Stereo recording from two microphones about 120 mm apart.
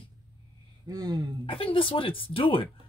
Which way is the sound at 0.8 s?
30° right (ahead or behind).